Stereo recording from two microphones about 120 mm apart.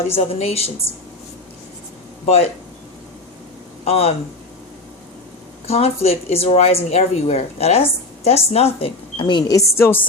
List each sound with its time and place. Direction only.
0.1 s speech: 55° left (ahead or behind)
2.2 s speech: 55° left (ahead or behind)
3.8 s speech: 55° left (ahead or behind)
5.6 s speech: 60° left (ahead or behind); by 9.6 s 30° left (ahead or behind)
9.7 s speech: 20° left (ahead or behind)